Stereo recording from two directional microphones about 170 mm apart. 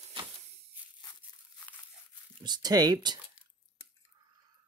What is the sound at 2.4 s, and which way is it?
Speech, 25° right (ahead or behind).